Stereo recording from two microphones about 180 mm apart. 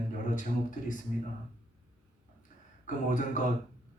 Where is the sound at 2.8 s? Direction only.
45° left (ahead or behind).